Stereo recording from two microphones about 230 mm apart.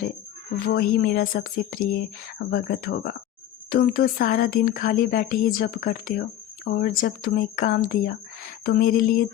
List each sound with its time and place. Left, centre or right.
0.6 s speech: left